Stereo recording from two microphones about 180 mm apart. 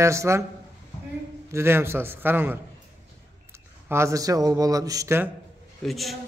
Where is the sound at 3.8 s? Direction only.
15° right (ahead or behind).